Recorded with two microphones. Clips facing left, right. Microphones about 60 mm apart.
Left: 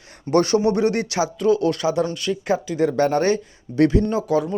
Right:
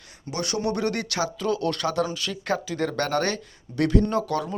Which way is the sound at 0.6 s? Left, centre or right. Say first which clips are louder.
Left 7 dB; left.